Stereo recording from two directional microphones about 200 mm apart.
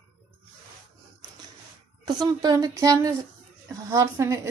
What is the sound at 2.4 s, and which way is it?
A woman's voice, 20° right (ahead or behind).